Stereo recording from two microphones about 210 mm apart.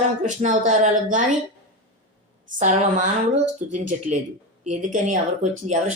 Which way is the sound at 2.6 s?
35° right (ahead or behind).